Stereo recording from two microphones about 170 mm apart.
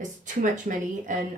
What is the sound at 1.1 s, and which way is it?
Speech, 50° right (ahead or behind).